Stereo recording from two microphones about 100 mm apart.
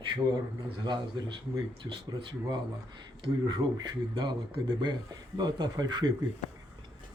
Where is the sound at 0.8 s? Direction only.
50° right (ahead or behind).